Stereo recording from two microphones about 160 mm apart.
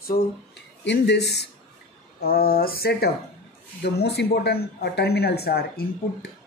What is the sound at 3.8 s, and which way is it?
Speech, 85° left.